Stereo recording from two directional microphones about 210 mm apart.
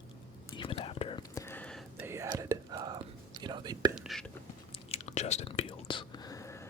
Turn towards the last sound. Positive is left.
turn(degrees=15)  # may be behind; listen again after turning